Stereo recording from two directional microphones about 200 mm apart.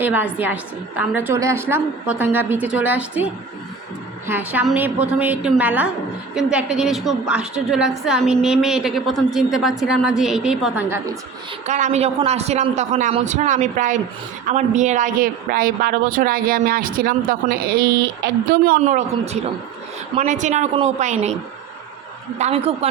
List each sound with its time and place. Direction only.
0.0 s a woman's voice: 10° right (ahead or behind)
4.3 s a woman's voice: 10° right (ahead or behind)
11.6 s speech: 35° right (ahead or behind)
18.8 s speech: 35° right (ahead or behind)
22.4 s speech: 30° right (ahead or behind)